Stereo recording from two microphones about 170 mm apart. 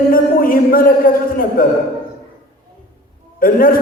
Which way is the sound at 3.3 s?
55° left (ahead or behind).